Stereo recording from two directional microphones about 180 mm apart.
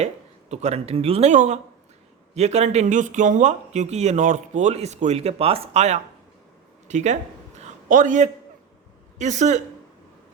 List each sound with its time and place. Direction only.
0.5 s speech: 35° right (ahead or behind)
6.8 s a sound: 40° right (ahead or behind)
9.1 s speech: 40° right (ahead or behind)